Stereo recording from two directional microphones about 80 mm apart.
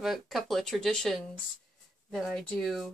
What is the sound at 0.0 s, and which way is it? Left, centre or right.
A woman's voice, centre.